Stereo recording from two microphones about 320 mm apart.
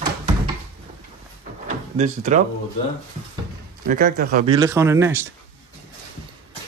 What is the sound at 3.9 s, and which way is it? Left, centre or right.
Speech, right.